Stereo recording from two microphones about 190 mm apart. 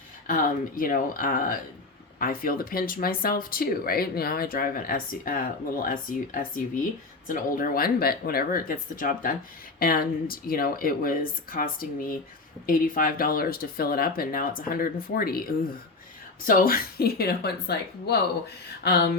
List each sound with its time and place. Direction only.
0.3 s speech: 50° left (ahead or behind)
16.5 s speech: 50° left (ahead or behind)